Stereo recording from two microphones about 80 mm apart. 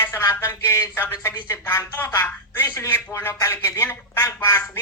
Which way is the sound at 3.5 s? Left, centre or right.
Left.